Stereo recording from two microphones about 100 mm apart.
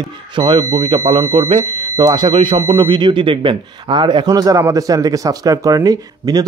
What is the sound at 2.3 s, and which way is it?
Speech, 75° right (ahead or behind).